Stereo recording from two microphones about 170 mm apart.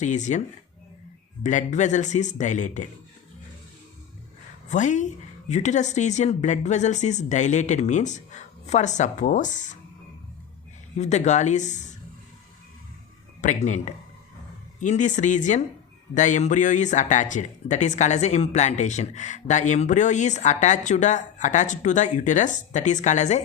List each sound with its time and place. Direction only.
0.0 s speech: 45° left (ahead or behind)
1.5 s speech: 45° left (ahead or behind)
4.7 s speech: 45° left (ahead or behind)
10.9 s speech: 40° left (ahead or behind)
13.4 s speech: 45° left (ahead or behind)